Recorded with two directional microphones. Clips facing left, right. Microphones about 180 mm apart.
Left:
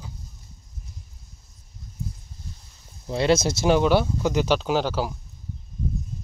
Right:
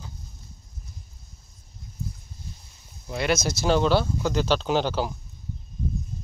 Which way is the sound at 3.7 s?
15° left (ahead or behind).